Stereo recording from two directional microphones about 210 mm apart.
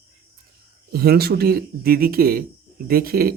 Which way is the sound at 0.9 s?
45° right (ahead or behind).